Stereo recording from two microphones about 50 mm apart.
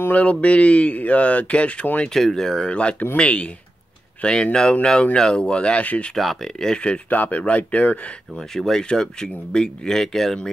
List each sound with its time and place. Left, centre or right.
0.1 s speech: left
2.1 s speech: centre
2.7 s speech: left
6.1 s speech: centre
7.1 s speech: left
8.5 s speech: centre